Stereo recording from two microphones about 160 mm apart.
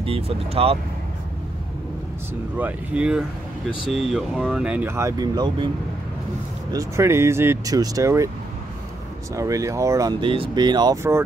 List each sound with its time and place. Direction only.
0.0 s speech: 35° right (ahead or behind)
2.5 s speech: 10° right (ahead or behind); by 5.7 s 25° right (ahead or behind)
6.7 s speech: 20° right (ahead or behind)
9.3 s speech: 20° right (ahead or behind)
10.2 s speech: 35° right (ahead or behind); by 11.2 s 15° right (ahead or behind)